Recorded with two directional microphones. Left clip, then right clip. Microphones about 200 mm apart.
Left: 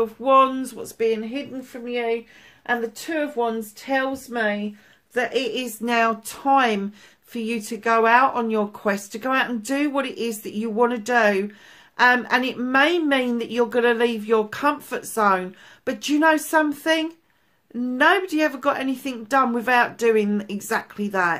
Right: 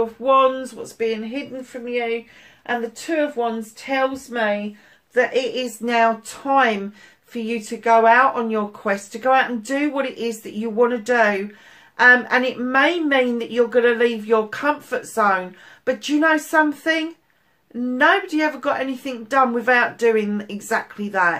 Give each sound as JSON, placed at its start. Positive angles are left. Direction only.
{"t": 0.0, "sound": "speech", "side_deg": 50}
{"t": 3.3, "sound": "speech", "side_deg": 50}